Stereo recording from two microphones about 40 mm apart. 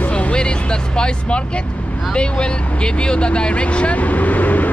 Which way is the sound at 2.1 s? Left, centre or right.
Left.